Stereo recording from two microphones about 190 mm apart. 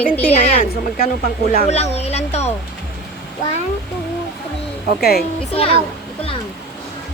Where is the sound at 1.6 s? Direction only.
35° left (ahead or behind).